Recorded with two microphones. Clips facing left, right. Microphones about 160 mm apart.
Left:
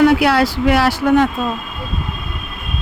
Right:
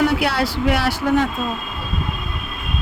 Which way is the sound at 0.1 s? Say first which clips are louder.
Left 6 dB; 90° left.